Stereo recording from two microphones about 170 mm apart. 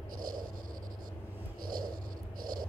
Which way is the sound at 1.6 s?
55° right (ahead or behind).